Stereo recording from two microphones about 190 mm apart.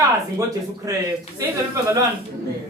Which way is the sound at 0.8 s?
20° right (ahead or behind).